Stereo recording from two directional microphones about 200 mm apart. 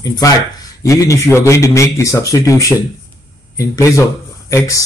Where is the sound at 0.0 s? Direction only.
20° left (ahead or behind).